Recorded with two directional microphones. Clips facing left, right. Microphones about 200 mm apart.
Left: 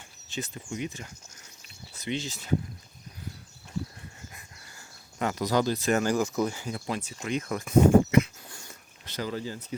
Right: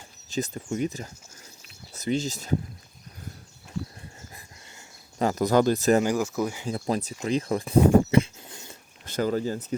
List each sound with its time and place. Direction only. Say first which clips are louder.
0.3 s speech: right 7 dB; 40° right (ahead or behind)
4.4 s dog: right 2 dB; 25° right (ahead or behind)
5.2 s speech: right 5 dB; 45° right (ahead or behind)
6.0 s speech: right 1 dB; 10° right (ahead or behind)
6.7 s speech: right 5 dB; 35° right (ahead or behind)
9.0 s speech: right 7 dB; 50° right (ahead or behind)